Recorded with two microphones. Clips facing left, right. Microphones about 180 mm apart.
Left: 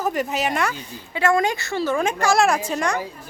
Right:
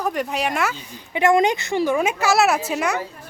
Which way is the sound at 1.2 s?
20° right (ahead or behind).